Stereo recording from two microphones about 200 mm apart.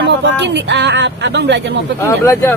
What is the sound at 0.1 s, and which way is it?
Speech, 60° right (ahead or behind).